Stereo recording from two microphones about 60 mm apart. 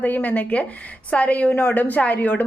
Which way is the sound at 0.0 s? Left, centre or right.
Left.